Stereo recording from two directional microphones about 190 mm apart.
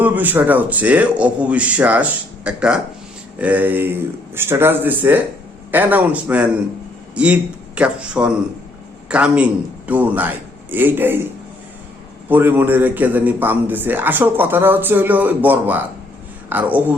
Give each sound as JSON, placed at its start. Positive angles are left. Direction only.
{"t": 0.0, "sound": "a man's voice", "side_deg": -10}
{"t": 12.3, "sound": "speech", "side_deg": -10}